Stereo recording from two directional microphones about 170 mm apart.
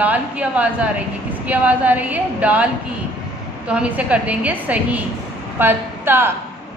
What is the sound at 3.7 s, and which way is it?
A woman's voice, 5° right (ahead or behind).